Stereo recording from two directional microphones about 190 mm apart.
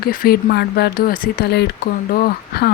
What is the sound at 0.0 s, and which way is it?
Speech, 50° left (ahead or behind).